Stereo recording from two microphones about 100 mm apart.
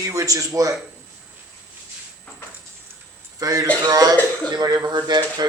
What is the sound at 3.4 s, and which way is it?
A man's voice, 35° right (ahead or behind).